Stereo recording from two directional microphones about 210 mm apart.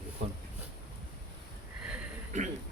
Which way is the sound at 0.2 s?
35° right (ahead or behind).